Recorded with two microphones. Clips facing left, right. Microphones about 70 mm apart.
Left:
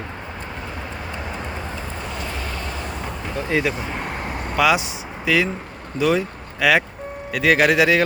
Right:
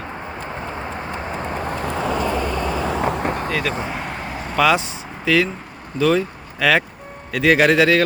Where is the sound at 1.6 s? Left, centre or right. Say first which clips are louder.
Right 6 dB; right.